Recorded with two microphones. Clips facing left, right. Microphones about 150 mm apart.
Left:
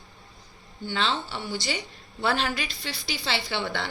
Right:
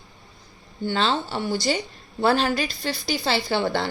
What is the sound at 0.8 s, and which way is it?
A woman's voice, 45° right (ahead or behind).